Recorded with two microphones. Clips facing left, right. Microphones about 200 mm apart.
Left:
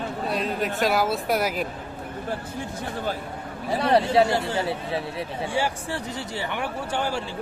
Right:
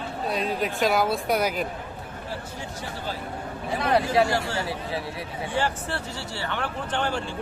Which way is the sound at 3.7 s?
30° left (ahead or behind).